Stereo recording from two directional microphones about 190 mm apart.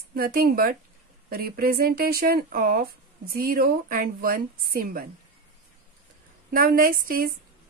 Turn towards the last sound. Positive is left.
turn(degrees=-50)  # may be behind; listen again after turning